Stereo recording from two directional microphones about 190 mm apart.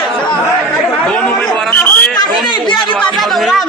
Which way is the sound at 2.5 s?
25° left (ahead or behind).